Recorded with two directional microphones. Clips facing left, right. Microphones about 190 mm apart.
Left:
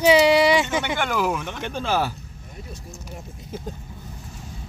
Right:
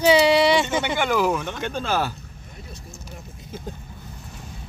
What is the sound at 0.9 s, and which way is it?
Speech, 5° right (ahead or behind).